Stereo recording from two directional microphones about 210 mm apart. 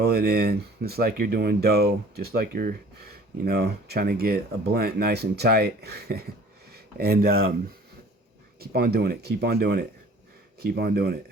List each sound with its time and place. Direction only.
0.0 s speech: 45° right (ahead or behind)
8.5 s speech: 50° right (ahead or behind)